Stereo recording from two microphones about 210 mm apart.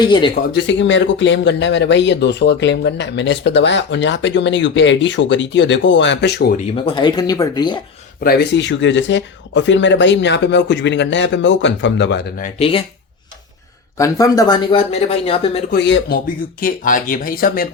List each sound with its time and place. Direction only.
0.0 s speech: 20° left (ahead or behind)
0.5 s speech: 60° left (ahead or behind)
6.8 s speech: 20° left (ahead or behind)
8.2 s speech: 45° left (ahead or behind)
12.4 s speech: 25° left (ahead or behind)
14.0 s speech: 15° left (ahead or behind)
15.7 s speech: 50° left (ahead or behind)